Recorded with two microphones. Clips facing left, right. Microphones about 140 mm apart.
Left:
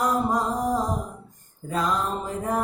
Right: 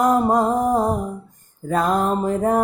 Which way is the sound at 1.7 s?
55° right (ahead or behind).